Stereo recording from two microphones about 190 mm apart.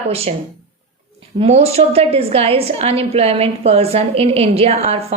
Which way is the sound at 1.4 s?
35° right (ahead or behind).